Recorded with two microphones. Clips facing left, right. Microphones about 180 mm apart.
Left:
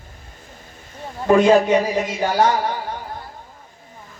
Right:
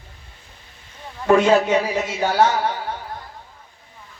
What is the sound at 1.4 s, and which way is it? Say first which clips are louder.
A man's voice: left 2 dB; 15° left (ahead or behind).